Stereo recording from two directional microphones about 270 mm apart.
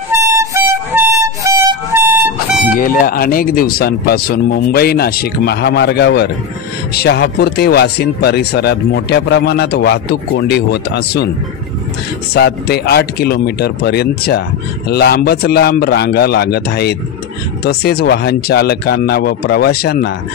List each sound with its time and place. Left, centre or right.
0.1 s vehicle horn: centre
0.9 s music: centre
2.7 s speech: left
12.4 s speech: left